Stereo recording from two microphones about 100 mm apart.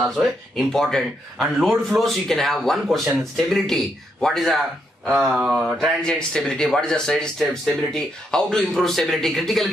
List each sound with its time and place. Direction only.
0.1 s speech: centre (ahead or behind)
6.0 s speech: 10° left (ahead or behind)